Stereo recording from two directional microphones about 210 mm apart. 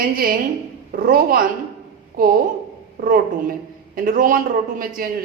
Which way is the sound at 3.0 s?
40° right (ahead or behind).